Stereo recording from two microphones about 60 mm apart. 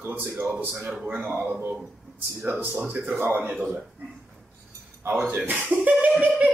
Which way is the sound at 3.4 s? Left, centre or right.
Right.